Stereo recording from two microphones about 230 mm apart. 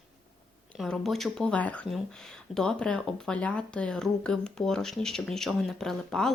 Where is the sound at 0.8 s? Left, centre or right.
Centre.